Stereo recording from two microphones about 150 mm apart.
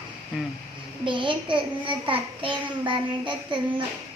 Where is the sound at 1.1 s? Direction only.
35° right (ahead or behind).